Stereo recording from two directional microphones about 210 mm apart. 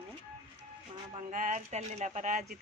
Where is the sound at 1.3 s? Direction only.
40° right (ahead or behind).